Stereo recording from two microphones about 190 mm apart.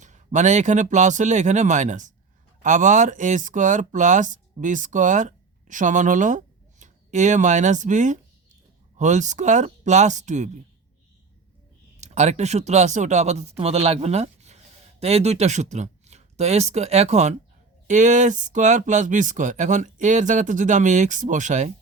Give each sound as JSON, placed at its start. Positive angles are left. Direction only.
{"t": 0.0, "sound": "speech", "side_deg": -40}
{"t": 11.9, "sound": "speech", "side_deg": -35}